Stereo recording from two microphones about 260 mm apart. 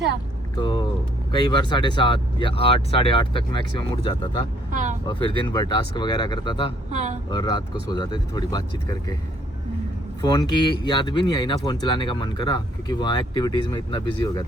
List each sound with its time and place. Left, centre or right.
0.5 s speech: centre
4.7 s vehicle: right
5.0 s speech: centre
6.9 s speech: right
7.3 s speech: centre
10.2 s speech: centre